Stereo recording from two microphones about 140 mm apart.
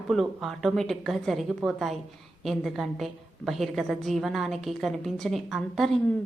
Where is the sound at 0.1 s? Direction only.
Centre (ahead or behind).